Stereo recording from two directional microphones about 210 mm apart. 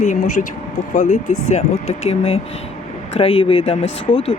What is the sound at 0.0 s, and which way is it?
Speech, 35° left (ahead or behind).